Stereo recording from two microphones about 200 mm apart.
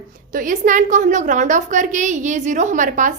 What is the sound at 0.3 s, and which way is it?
A woman's voice, 40° right (ahead or behind).